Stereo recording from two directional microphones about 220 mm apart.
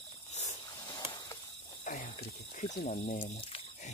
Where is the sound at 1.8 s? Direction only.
35° left (ahead or behind).